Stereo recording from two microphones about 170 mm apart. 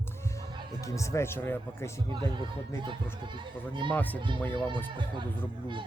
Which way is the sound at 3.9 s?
10° left (ahead or behind).